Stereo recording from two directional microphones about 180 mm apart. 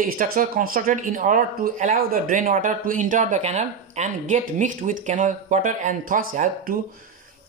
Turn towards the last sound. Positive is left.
turn(degrees=-50)  # may be behind; listen again after turning